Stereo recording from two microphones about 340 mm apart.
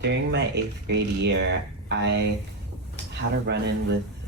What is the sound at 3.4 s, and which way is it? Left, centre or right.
Speech, right.